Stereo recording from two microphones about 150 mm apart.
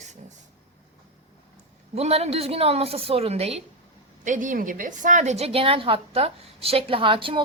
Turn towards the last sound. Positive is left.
turn(degrees=-35)  # may be behind; listen again after turning